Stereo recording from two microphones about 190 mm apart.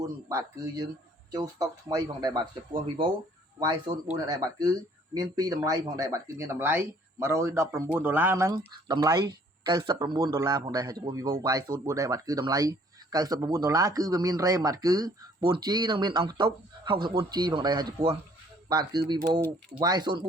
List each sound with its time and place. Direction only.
0.0 s speech: 15° right (ahead or behind)